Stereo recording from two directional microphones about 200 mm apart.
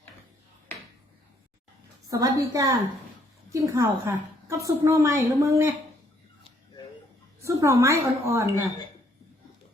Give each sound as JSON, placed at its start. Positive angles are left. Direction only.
{"t": 2.0, "sound": "a woman's voice", "side_deg": -15}
{"t": 7.4, "sound": "a woman's voice", "side_deg": -15}